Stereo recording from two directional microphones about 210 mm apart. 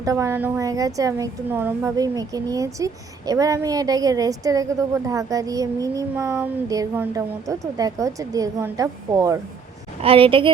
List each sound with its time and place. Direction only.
0.0 s a woman's voice: 15° right (ahead or behind)